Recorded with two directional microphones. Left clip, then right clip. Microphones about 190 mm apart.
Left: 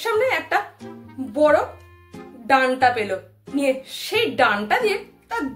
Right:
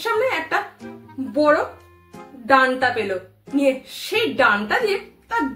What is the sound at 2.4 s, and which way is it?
A woman's voice, 15° left (ahead or behind).